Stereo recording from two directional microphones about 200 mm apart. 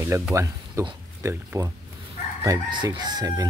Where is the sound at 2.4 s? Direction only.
20° right (ahead or behind).